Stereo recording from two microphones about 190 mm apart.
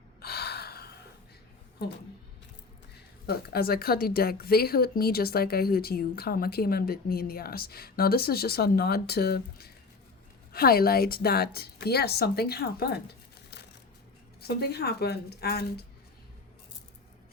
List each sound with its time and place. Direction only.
0.2 s gasp: 55° left (ahead or behind)
3.2 s a woman's voice: 55° left (ahead or behind)